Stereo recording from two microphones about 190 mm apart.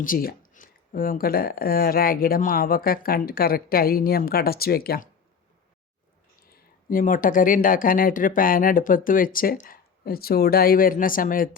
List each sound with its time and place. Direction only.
0.0 s speech: 50° left (ahead or behind)
6.5 s speech: 45° left (ahead or behind)